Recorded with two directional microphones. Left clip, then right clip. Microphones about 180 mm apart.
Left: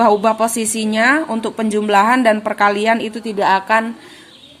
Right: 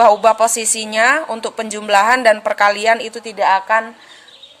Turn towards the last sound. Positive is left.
turn(degrees=-5)  # may be behind; listen again after turning